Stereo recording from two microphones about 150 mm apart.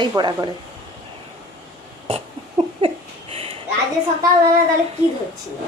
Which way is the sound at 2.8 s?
40° right (ahead or behind).